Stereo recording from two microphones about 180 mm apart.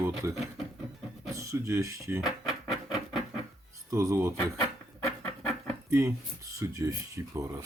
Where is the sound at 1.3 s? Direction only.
15° right (ahead or behind).